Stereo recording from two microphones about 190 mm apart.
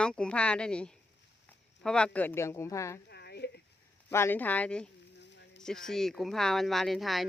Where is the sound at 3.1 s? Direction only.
60° left (ahead or behind).